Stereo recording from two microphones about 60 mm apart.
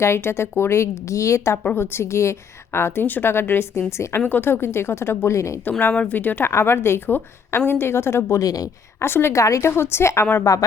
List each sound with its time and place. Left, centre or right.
0.0 s a woman's voice: left
1.6 s a woman's voice: left
4.2 s a woman's voice: left
6.1 s a woman's voice: left
6.5 s a woman's voice: left
8.4 s a woman's voice: left
9.0 s a woman's voice: left
9.3 s a woman's voice: left
10.5 s a woman's voice: left